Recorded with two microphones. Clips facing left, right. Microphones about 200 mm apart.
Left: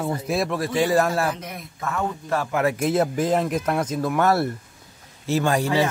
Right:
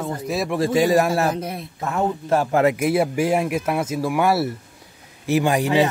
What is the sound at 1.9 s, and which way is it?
Speech, 30° right (ahead or behind).